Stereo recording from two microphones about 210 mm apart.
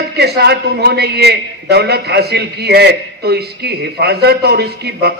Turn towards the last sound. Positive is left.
turn(degrees=-50)  # may be behind; listen again after turning